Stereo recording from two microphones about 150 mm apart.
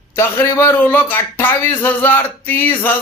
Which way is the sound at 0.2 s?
20° left (ahead or behind).